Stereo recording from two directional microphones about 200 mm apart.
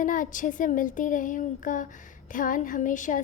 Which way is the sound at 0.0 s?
40° left (ahead or behind).